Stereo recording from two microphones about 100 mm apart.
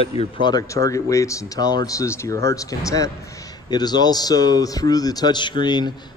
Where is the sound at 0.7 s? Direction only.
30° left (ahead or behind).